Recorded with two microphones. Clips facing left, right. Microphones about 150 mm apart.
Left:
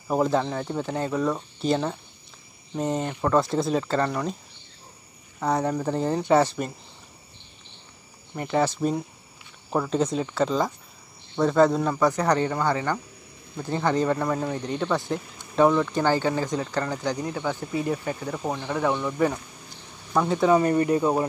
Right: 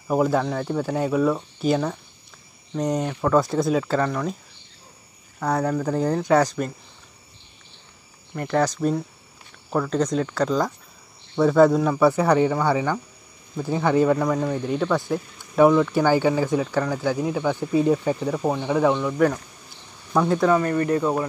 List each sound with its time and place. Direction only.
0.1 s speech: 5° right (ahead or behind)
5.4 s speech: centre (ahead or behind)
8.4 s speech: 5° left (ahead or behind)
18.9 s speech: 5° left (ahead or behind)
20.5 s speech: 20° left (ahead or behind)